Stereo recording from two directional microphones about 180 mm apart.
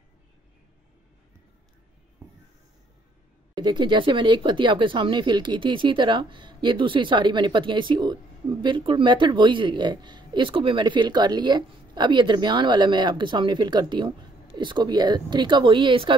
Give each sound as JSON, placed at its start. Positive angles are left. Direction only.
{"t": 3.5, "sound": "speech", "side_deg": -25}